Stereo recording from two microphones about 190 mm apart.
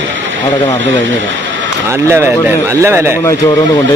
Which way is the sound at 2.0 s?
15° right (ahead or behind).